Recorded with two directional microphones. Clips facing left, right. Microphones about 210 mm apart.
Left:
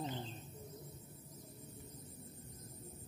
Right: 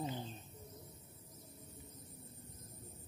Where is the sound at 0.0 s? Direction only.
5° right (ahead or behind).